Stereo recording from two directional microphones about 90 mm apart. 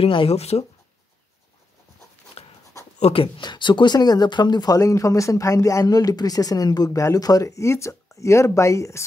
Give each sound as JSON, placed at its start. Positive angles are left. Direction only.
{"t": 0.0, "sound": "speech", "side_deg": 80}
{"t": 2.4, "sound": "dog", "side_deg": 90}
{"t": 3.1, "sound": "speech", "side_deg": 85}
{"t": 3.4, "sound": "speech", "side_deg": 60}